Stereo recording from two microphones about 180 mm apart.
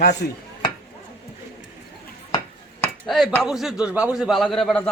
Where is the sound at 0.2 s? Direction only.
60° left (ahead or behind).